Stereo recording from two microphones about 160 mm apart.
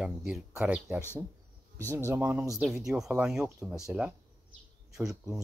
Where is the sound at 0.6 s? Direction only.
10° right (ahead or behind).